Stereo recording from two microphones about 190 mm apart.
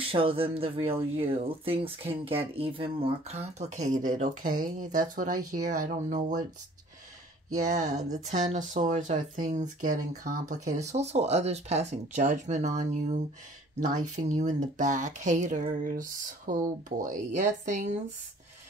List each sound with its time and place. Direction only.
0.1 s speech: 30° right (ahead or behind)
7.7 s speech: 35° right (ahead or behind)